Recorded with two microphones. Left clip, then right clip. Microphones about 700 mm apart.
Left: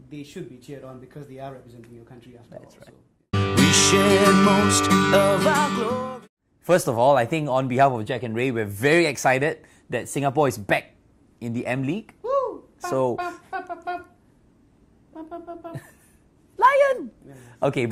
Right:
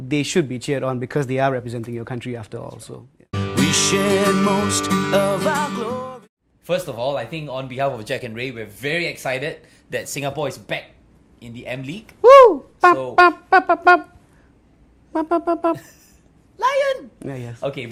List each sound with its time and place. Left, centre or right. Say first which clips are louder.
0.1 s speech: right 18 dB; right
3.3 s music: left 1 dB; centre
6.7 s speech: left 5 dB; left
13.1 s speech: right 18 dB; right
15.1 s a sound: right 17 dB; right
16.6 s speech: left 2 dB; left